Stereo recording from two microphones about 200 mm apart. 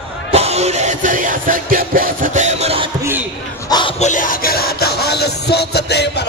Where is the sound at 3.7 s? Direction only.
25° left (ahead or behind); by 6.3 s 55° left (ahead or behind).